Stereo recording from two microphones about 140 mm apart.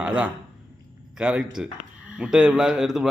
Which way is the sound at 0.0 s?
10° right (ahead or behind).